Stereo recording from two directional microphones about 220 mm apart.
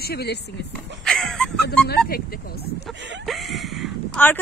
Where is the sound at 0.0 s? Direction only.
45° left (ahead or behind).